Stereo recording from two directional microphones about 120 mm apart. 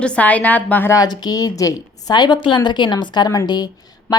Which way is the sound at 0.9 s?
35° left (ahead or behind).